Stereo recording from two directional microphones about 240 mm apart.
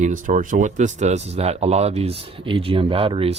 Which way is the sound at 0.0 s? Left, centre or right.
Right.